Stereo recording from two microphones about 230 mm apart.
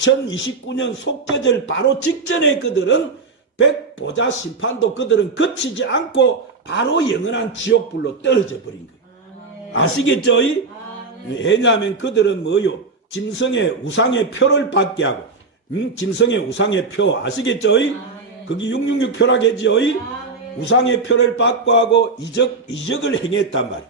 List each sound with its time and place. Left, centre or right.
0.3 s a man's voice: left
9.7 s a man's voice: left